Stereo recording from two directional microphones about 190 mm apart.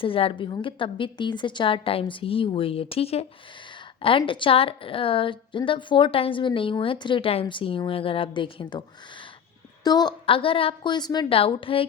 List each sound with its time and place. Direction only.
0.0 s a woman's voice: 30° left (ahead or behind)
9.8 s a woman's voice: 20° left (ahead or behind)